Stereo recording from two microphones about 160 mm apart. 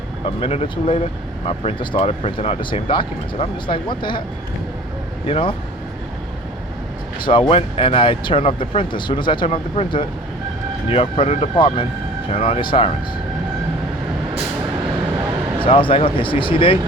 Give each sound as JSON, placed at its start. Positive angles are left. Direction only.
{"t": 0.3, "sound": "speech", "side_deg": 35}
{"t": 5.2, "sound": "speech", "side_deg": 35}
{"t": 7.3, "sound": "speech", "side_deg": 35}
{"t": 15.6, "sound": "speech", "side_deg": 35}